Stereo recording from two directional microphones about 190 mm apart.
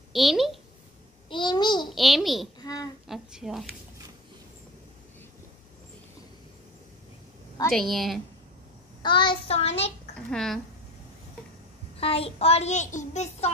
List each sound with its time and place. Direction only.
0.1 s a woman's voice: centre (ahead or behind)
1.3 s a child's voice: 25° left (ahead or behind)
1.9 s a child's voice: centre (ahead or behind)
2.6 s a child's voice: 20° left (ahead or behind)
3.1 s a child's voice: 5° right (ahead or behind)
7.7 s a child's voice: centre (ahead or behind)
9.0 s a child's voice: 25° left (ahead or behind)
10.1 s a child's voice: 5° left (ahead or behind)
12.0 s a child's voice: 30° left (ahead or behind)